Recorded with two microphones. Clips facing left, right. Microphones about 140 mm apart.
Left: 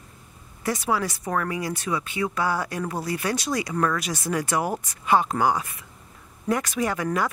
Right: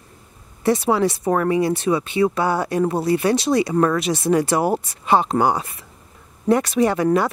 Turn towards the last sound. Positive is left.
turn(degrees=-30)  # may be behind; listen again after turning